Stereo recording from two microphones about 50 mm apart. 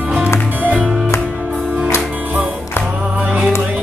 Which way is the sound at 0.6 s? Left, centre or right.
Right.